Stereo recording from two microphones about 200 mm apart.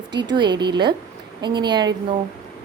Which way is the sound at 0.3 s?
20° right (ahead or behind).